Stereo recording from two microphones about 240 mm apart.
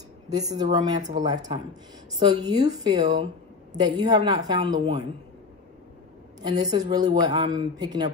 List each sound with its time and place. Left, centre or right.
0.3 s a man's voice: centre
6.4 s a man's voice: centre